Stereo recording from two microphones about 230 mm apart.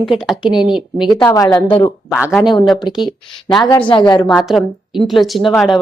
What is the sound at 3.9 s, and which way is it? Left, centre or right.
Speech, centre.